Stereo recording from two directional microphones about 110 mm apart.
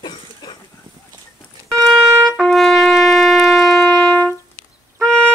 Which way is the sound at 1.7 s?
5° left (ahead or behind).